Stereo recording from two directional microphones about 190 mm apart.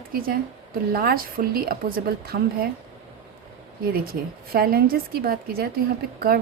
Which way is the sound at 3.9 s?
55° right (ahead or behind).